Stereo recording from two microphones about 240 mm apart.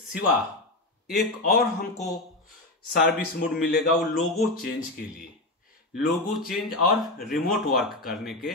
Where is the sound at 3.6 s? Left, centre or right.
Left.